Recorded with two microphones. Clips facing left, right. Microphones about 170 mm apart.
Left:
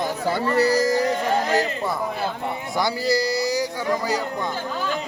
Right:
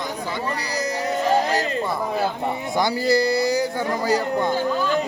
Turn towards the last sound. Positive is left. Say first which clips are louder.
# right 3 dB
turn(degrees=-55)  # may be behind; listen again after turning